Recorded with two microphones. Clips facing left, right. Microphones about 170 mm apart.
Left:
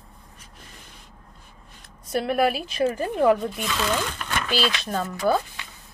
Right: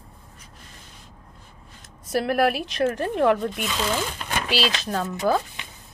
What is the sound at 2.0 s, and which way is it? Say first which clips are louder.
Speech: right 1 dB; centre (ahead or behind).